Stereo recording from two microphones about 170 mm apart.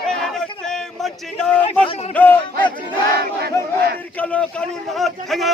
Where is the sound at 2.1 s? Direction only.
10° left (ahead or behind).